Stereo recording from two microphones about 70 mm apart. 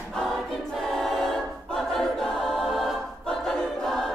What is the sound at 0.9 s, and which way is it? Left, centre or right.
Choir, centre.